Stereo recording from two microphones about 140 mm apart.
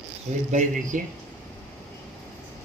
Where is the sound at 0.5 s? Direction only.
65° right (ahead or behind).